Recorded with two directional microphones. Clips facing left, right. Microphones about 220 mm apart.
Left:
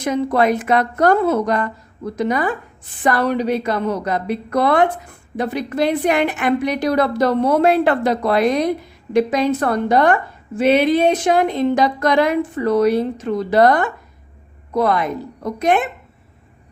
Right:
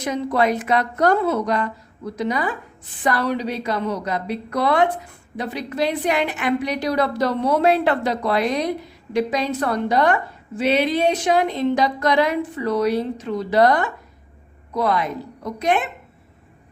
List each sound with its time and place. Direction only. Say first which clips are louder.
0.0 s a woman's voice: left 3 dB; 50° left (ahead or behind)